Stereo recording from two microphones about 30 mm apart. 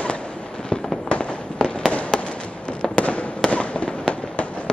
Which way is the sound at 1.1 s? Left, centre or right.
Left.